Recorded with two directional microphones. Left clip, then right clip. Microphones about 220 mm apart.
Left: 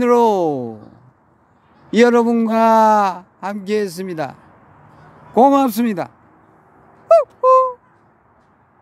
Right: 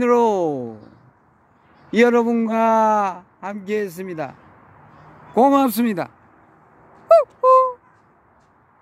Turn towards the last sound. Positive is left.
turn(degrees=0)  # may be behind; listen again after turning